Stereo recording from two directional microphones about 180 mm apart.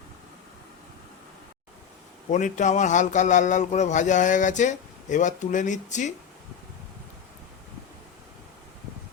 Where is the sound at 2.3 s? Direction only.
40° left (ahead or behind).